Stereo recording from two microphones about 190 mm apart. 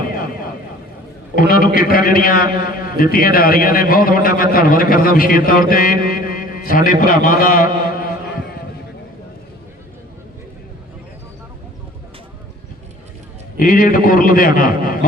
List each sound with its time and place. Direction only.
1.4 s a man's voice: 50° left (ahead or behind)
13.6 s a man's voice: 45° left (ahead or behind)